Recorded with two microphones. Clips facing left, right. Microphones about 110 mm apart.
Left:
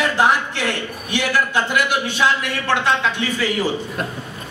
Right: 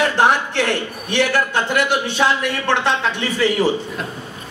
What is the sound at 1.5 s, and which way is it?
A man's voice, 40° right (ahead or behind).